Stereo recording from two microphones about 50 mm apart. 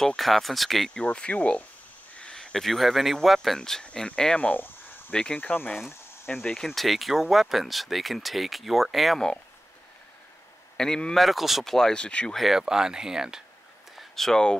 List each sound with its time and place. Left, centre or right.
0.0 s speech: centre
0.9 s speech: left
2.3 s speech: centre
3.4 s speech: centre
4.4 s speech: left
5.1 s speech: centre
5.4 s speech: left
6.2 s speech: centre
10.8 s speech: centre
11.1 s speech: centre
11.6 s speech: centre
12.4 s speech: centre
13.9 s a sound: centre